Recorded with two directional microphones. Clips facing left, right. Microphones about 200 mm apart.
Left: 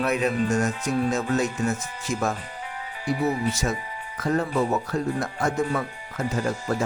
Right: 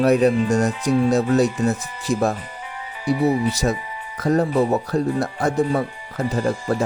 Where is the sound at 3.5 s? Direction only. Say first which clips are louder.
Right 5 dB; 35° right (ahead or behind).